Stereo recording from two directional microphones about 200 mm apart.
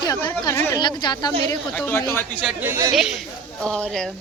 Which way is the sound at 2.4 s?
5° right (ahead or behind).